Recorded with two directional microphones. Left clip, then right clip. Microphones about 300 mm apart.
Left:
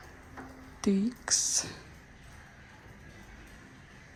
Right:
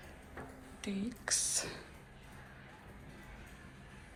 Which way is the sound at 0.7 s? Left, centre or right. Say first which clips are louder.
Left 11 dB; left.